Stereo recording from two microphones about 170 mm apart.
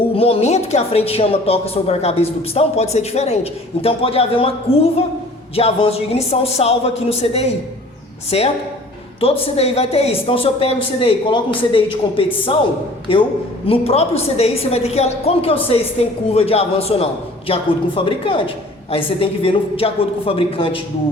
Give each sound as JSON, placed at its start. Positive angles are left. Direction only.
{"t": 0.1, "sound": "a woman's voice", "side_deg": 35}